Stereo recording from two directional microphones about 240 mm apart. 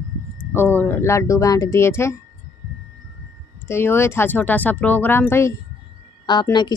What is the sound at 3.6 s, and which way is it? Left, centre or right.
A woman's voice, centre.